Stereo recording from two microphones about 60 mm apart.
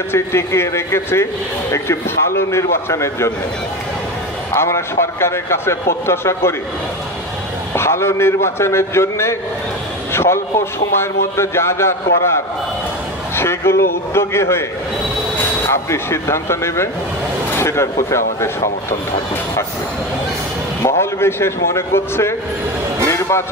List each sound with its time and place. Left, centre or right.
0.1 s a man's voice: left
4.6 s a man's voice: left
7.7 s a man's voice: left
13.4 s a man's voice: left
15.6 s a man's voice: left
21.0 s a man's voice: left
23.0 s music: left